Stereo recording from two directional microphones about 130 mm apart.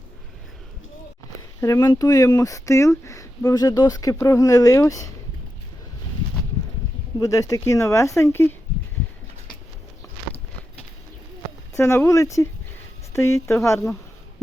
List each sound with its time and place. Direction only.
1.6 s speech: 25° left (ahead or behind)
7.2 s speech: 25° left (ahead or behind)
11.7 s speech: 20° left (ahead or behind)